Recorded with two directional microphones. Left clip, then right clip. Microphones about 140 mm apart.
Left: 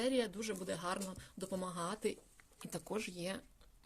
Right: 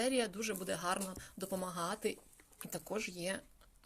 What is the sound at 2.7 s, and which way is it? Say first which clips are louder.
Speech: right 1 dB; 55° left (ahead or behind).